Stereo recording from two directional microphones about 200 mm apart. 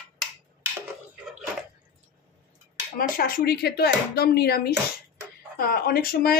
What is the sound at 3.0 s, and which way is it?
Speech, 45° left (ahead or behind).